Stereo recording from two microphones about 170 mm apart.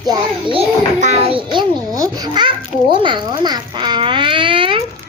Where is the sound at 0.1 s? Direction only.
30° right (ahead or behind).